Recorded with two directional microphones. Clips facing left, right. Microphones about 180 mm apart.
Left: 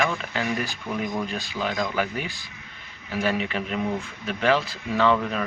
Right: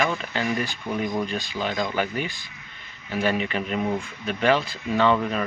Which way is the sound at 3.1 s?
5° left (ahead or behind).